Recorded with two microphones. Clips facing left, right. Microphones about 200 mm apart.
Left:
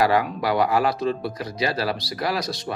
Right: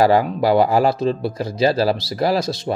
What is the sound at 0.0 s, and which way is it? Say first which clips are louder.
Speech: right 5 dB; 30° right (ahead or behind).